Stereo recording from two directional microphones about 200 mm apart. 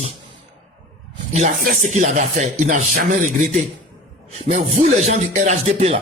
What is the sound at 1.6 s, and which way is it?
A man's voice, 40° right (ahead or behind).